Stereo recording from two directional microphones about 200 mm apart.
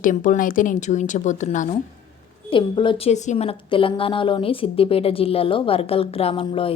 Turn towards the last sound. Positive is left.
turn(degrees=25)  # may be behind; listen again after turning